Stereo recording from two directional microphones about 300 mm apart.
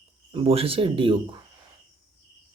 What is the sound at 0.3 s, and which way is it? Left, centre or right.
Speech, centre.